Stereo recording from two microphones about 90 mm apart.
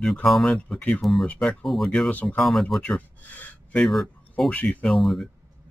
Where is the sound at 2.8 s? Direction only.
15° left (ahead or behind); by 5.2 s centre (ahead or behind).